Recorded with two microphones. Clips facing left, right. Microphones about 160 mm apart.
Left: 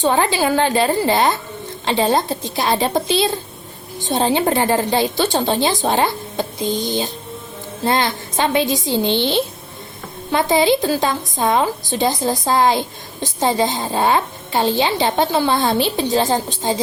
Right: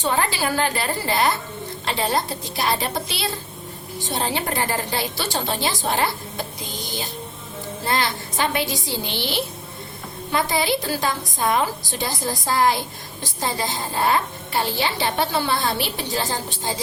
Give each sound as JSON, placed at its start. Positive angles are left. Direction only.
{"t": 0.1, "sound": "a woman's voice", "side_deg": 25}
{"t": 4.0, "sound": "a woman's voice", "side_deg": 25}